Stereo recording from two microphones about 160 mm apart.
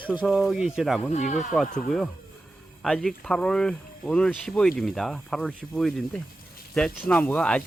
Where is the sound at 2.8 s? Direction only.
5° left (ahead or behind).